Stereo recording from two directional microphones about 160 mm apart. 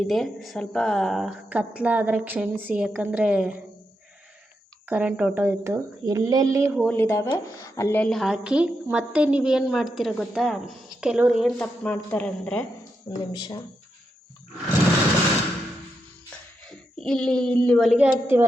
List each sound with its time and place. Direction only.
0.0 s speech: centre (ahead or behind)
4.9 s speech: 10° right (ahead or behind)
6.9 s a woman's voice: 15° left (ahead or behind); by 11.5 s 5° right (ahead or behind)
11.6 s speech: 10° left (ahead or behind)
13.1 s speech: 25° left (ahead or behind)
17.0 s a woman's voice: 5° left (ahead or behind); by 18.4 s 10° right (ahead or behind)